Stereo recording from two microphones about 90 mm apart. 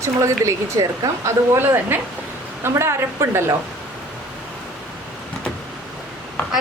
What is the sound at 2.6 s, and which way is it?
Speech, 30° right (ahead or behind).